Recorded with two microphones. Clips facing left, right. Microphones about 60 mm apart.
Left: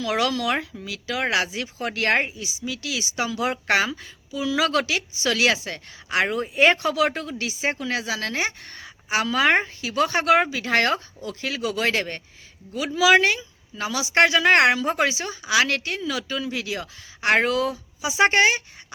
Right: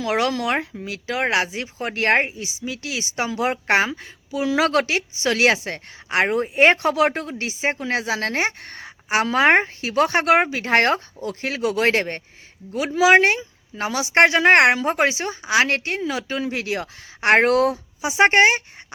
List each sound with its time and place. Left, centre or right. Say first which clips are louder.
0.0 s speech: right 2 dB; right
4.3 s speech: right 3 dB; right